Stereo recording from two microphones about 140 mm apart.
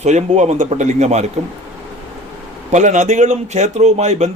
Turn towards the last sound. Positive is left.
turn(degrees=-55)  # may be behind; listen again after turning